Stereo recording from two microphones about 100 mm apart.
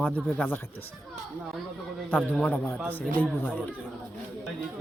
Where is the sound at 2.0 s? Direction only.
15° left (ahead or behind).